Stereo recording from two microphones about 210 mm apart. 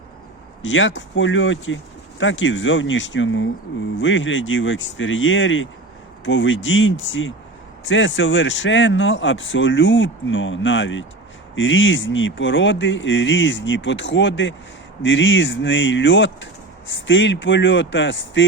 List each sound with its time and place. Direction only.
0.6 s speech: 60° left (ahead or behind)